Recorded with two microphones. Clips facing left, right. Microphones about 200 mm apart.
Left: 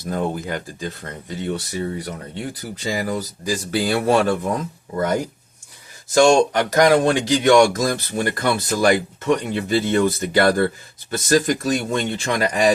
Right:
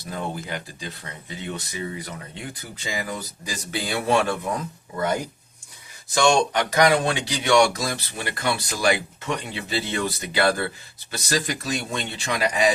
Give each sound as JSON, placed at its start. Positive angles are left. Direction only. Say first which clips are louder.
{"t": 0.0, "sound": "speech", "louder": "left 7 dB", "side_deg": 45}
{"t": 6.9, "sound": "speech", "louder": "left 7 dB", "side_deg": 50}